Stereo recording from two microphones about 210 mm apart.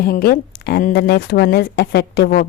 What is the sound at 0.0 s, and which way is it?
A woman's voice, 45° left (ahead or behind).